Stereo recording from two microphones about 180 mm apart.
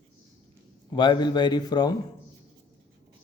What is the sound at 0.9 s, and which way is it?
Speech, 25° left (ahead or behind).